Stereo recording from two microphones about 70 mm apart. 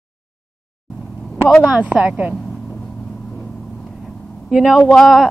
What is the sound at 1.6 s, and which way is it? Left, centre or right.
Speech, centre.